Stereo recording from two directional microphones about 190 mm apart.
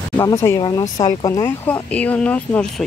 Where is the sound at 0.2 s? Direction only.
15° left (ahead or behind).